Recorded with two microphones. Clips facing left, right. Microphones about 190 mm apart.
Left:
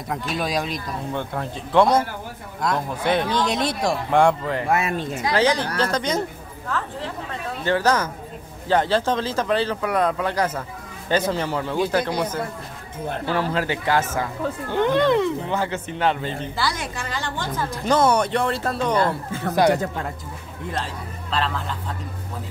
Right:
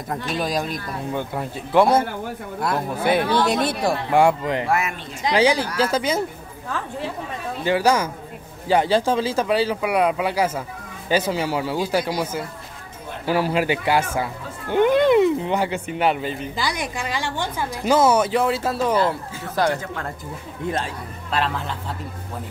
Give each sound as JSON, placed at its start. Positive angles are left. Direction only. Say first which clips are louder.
{"t": 0.1, "sound": "speech", "louder": "right 1 dB", "side_deg": 0}
{"t": 4.6, "sound": "speech", "louder": "left 3 dB", "side_deg": 25}
{"t": 5.2, "sound": "speech", "louder": "right 3 dB", "side_deg": -15}
{"t": 7.6, "sound": "speech", "louder": "right 2 dB", "side_deg": -10}
{"t": 19.5, "sound": "speech", "louder": "left 3 dB", "side_deg": 15}